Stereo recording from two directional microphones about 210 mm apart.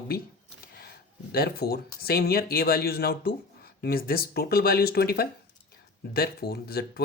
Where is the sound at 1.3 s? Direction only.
45° left (ahead or behind).